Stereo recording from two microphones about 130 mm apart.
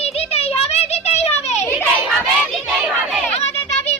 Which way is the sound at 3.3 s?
55° left (ahead or behind).